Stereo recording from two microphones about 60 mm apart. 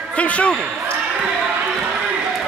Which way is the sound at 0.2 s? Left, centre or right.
Left.